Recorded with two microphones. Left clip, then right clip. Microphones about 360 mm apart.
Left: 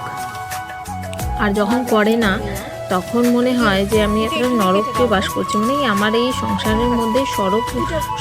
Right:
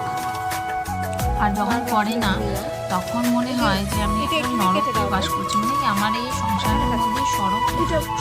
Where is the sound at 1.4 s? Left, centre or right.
Centre.